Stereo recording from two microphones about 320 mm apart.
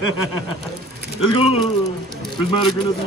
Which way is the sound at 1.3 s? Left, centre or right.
Centre.